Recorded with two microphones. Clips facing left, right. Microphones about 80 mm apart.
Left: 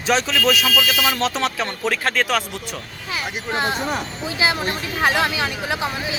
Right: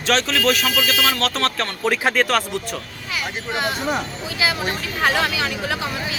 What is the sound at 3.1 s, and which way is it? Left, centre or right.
Speech, left.